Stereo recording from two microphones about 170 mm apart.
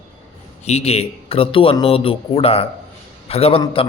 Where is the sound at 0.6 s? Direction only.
40° left (ahead or behind).